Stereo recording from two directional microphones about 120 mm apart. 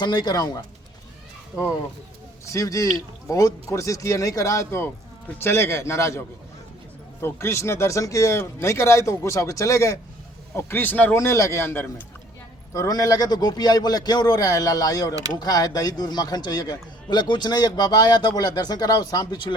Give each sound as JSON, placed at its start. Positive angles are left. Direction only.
{"t": 0.0, "sound": "a man's voice", "side_deg": 35}
{"t": 2.4, "sound": "speech", "side_deg": 25}
{"t": 12.7, "sound": "a man's voice", "side_deg": 30}